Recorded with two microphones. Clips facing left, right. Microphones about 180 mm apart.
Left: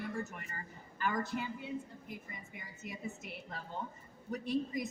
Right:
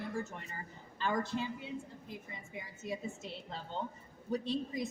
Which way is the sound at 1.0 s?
25° right (ahead or behind).